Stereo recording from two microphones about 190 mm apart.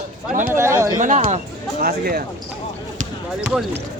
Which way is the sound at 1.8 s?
50° right (ahead or behind).